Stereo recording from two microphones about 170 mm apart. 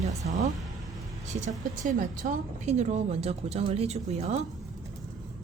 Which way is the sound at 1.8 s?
50° right (ahead or behind).